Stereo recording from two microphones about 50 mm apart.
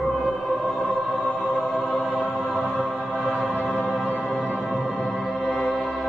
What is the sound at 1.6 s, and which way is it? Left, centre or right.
Music, centre.